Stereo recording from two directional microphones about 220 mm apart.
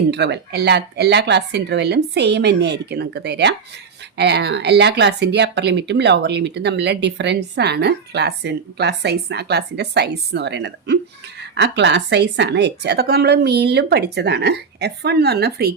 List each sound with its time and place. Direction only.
0.1 s speech: 50° right (ahead or behind)